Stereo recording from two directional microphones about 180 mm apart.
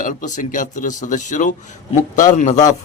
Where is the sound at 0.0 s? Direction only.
45° left (ahead or behind).